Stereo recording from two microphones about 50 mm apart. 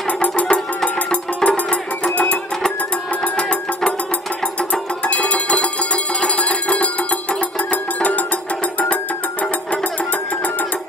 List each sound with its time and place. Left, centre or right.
0.0 s music: left